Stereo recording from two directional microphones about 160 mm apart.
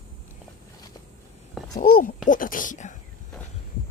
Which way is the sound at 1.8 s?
65° left (ahead or behind).